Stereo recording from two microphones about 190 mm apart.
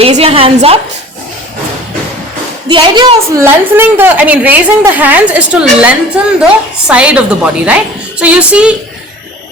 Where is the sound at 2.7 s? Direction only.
25° right (ahead or behind).